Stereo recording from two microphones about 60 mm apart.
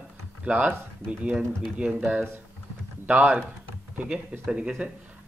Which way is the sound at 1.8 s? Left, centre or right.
Right.